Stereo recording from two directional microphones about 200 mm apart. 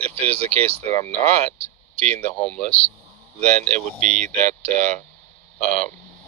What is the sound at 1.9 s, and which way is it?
Speech, 5° left (ahead or behind).